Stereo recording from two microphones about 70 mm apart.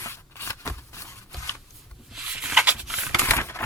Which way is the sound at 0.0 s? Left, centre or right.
Left.